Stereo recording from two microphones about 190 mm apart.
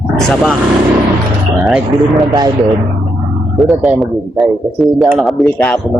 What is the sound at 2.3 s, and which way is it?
Speech, 20° right (ahead or behind).